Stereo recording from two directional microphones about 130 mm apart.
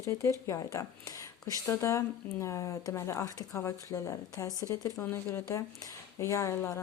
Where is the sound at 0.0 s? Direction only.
25° left (ahead or behind).